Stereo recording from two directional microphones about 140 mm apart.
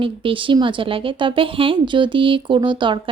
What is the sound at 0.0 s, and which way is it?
A woman's voice, 40° right (ahead or behind).